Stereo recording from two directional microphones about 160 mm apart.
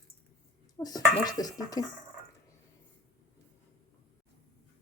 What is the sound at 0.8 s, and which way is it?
Speech, 25° left (ahead or behind).